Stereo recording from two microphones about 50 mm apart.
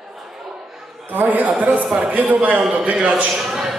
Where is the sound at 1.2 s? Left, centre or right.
Right.